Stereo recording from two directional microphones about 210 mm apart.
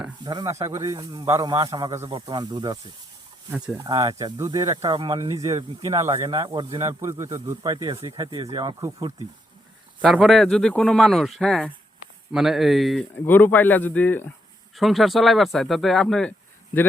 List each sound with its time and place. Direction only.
0.3 s a man's voice: 20° right (ahead or behind)
3.8 s a man's voice: 20° right (ahead or behind)
10.0 s speech: centre (ahead or behind)